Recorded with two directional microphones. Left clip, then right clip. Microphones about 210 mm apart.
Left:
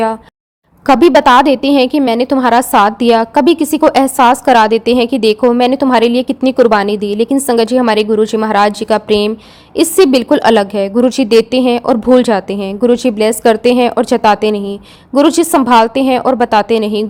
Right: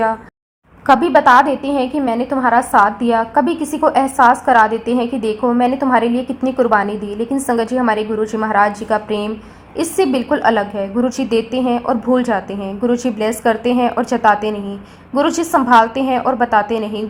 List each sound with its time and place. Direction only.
0.9 s a woman's voice: 50° left (ahead or behind)
12.1 s a woman's voice: 60° left (ahead or behind)
15.3 s a woman's voice: 85° left
15.6 s a woman's voice: 50° left (ahead or behind)